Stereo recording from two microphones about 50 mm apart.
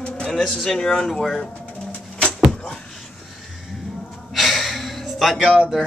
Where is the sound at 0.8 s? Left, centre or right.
Centre.